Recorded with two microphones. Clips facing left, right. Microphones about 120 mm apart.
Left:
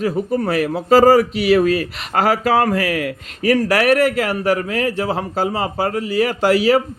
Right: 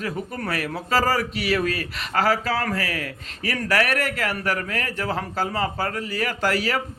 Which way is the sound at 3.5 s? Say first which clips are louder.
Left 8 dB; 40° left (ahead or behind).